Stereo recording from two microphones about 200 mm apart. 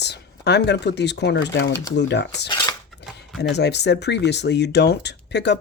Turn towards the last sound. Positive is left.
turn(degrees=60)  # may be behind; listen again after turning